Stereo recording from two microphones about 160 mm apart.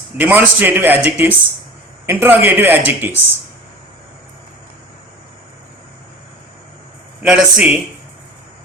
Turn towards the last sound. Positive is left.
turn(degrees=-5)  # may be behind; listen again after turning